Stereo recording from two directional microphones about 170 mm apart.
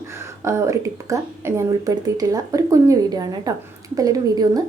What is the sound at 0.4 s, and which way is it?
A woman's voice, 15° right (ahead or behind).